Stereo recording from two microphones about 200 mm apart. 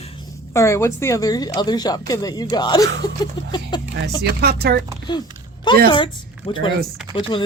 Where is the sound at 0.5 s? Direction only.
15° left (ahead or behind).